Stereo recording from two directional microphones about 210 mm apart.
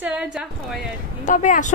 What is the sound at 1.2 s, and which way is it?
Speech, 35° left (ahead or behind).